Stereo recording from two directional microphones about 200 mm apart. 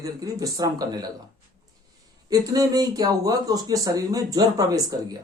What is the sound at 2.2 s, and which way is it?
Speech, 20° right (ahead or behind).